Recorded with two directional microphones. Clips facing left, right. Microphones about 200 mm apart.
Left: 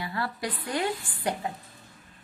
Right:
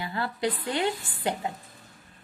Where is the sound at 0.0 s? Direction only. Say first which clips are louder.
Right 3 dB; 25° right (ahead or behind).